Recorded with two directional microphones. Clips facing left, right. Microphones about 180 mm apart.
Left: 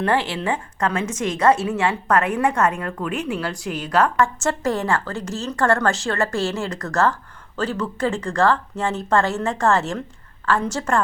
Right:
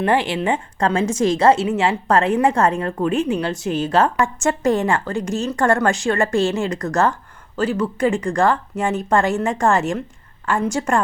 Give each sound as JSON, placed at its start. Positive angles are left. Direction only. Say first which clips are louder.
{"t": 0.0, "sound": "a woman's voice", "louder": "right 3 dB", "side_deg": -15}